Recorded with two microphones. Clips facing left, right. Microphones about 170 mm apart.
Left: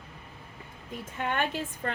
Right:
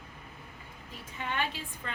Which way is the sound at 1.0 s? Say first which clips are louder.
Left 4 dB; 50° left (ahead or behind).